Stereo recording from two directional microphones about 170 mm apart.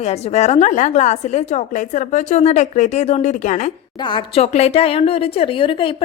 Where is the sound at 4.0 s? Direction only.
30° left (ahead or behind).